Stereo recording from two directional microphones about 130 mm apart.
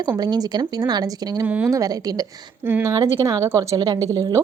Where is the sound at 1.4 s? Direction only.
10° right (ahead or behind).